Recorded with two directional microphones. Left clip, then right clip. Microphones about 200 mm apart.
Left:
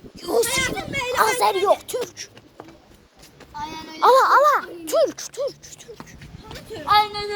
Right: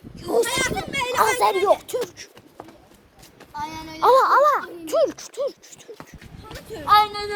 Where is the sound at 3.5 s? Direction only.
25° right (ahead or behind).